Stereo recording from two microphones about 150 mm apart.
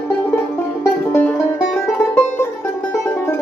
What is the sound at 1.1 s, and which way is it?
Music, 10° left (ahead or behind).